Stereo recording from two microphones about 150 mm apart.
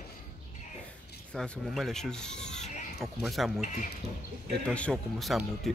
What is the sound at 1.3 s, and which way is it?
Speech, centre (ahead or behind).